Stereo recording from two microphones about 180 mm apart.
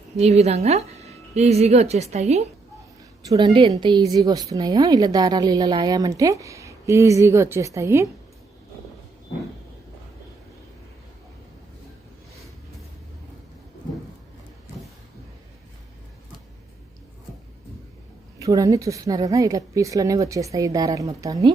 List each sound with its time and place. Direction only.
0.2 s a woman's voice: 35° right (ahead or behind)
3.2 s a woman's voice: 25° right (ahead or behind)
18.3 s a woman's voice: 20° right (ahead or behind)